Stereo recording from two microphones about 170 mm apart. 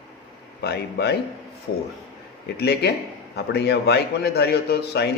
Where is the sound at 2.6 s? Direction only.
75° left (ahead or behind).